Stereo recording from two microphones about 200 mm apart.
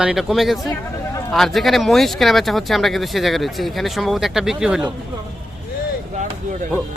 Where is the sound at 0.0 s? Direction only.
5° right (ahead or behind).